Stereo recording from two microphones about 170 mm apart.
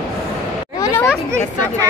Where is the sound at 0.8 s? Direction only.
15° left (ahead or behind).